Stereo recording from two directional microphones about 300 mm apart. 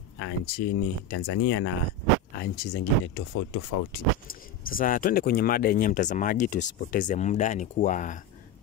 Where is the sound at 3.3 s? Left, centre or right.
Left.